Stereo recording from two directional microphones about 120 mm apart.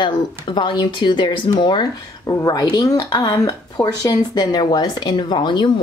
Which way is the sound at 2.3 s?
30° left (ahead or behind).